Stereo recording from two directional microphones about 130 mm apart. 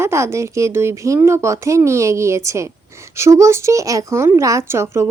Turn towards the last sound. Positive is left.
turn(degrees=-20)  # may be behind; listen again after turning